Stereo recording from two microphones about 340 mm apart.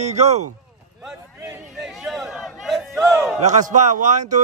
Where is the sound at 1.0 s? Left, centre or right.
Centre.